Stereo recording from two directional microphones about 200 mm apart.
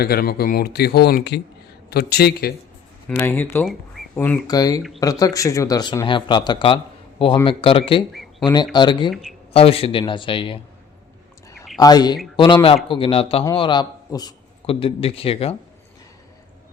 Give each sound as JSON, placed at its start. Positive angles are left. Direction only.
{"t": 0.0, "sound": "speech", "side_deg": 50}
{"t": 3.1, "sound": "speech", "side_deg": 10}
{"t": 4.4, "sound": "speech", "side_deg": 20}
{"t": 8.1, "sound": "a sound", "side_deg": 0}
{"t": 8.7, "sound": "speech", "side_deg": 20}
{"t": 11.8, "sound": "a man's voice", "side_deg": 20}